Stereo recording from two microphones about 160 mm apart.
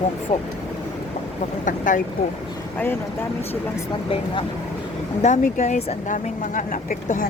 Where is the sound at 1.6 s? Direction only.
55° left (ahead or behind).